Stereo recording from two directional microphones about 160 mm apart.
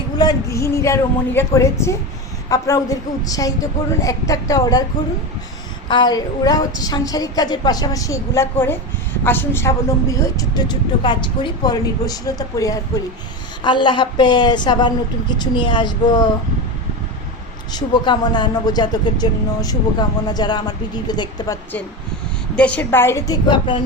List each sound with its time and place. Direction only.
0.2 s speech: 20° left (ahead or behind)
5.9 s speech: 25° left (ahead or behind)
17.7 s speech: 25° left (ahead or behind)
22.5 s a woman's voice: 5° left (ahead or behind); by 23.8 s 30° left (ahead or behind)